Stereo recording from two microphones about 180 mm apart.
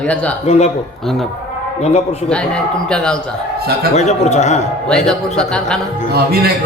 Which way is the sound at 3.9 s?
40° left (ahead or behind).